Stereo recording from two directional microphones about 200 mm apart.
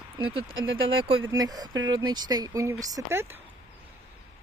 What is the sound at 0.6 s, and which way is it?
Speech, 80° right.